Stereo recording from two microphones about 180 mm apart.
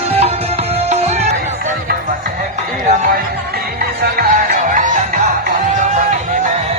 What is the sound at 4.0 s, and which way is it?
Music, 55° right (ahead or behind).